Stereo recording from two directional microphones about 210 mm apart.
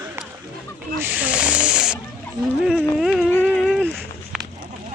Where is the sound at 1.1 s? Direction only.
5° right (ahead or behind).